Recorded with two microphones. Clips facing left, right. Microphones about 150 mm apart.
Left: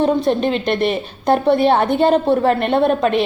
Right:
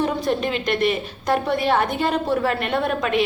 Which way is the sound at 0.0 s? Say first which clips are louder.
Left 6 dB; 30° left (ahead or behind).